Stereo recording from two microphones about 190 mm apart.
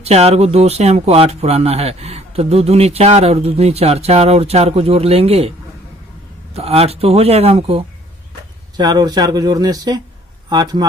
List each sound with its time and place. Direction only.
0.0 s speech: 35° right (ahead or behind)
6.5 s speech: 30° right (ahead or behind)
8.7 s speech: 20° right (ahead or behind)